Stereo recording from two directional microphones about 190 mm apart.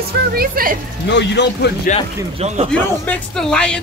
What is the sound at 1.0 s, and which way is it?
Speech, 65° left (ahead or behind).